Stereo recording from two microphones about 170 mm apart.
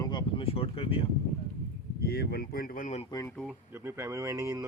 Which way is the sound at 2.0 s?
70° left (ahead or behind).